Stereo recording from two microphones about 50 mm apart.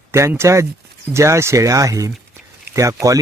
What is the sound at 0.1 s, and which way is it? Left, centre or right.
Speech, right.